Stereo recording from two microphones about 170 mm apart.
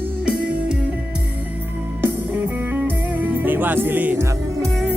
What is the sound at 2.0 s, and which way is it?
Music, 10° right (ahead or behind).